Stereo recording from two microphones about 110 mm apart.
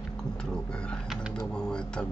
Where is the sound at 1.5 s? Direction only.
10° left (ahead or behind).